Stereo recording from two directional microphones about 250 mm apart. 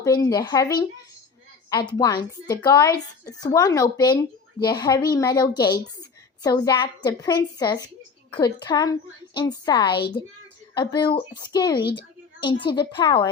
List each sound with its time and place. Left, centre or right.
0.0 s a child's voice: centre